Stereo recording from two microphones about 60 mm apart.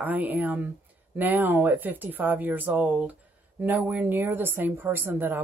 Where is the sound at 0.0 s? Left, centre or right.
Right.